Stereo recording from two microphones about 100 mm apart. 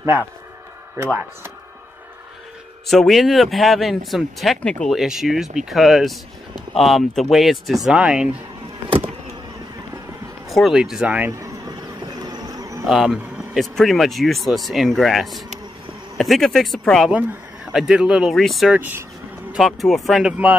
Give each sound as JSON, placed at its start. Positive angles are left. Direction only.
{"t": 2.9, "sound": "speech", "side_deg": 0}
{"t": 4.9, "sound": "speech", "side_deg": -5}
{"t": 10.5, "sound": "speech", "side_deg": -5}
{"t": 11.3, "sound": "bee", "side_deg": -40}
{"t": 12.8, "sound": "speech", "side_deg": -5}
{"t": 18.7, "sound": "speech", "side_deg": -20}
{"t": 19.6, "sound": "speech", "side_deg": 0}